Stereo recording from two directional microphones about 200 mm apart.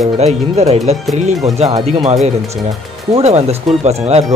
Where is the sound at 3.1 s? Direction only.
30° right (ahead or behind).